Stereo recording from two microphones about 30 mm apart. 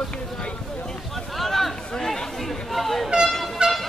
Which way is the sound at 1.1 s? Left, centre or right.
Centre.